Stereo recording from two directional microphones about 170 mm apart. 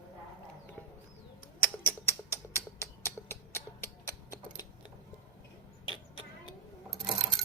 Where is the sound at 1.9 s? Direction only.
15° left (ahead or behind).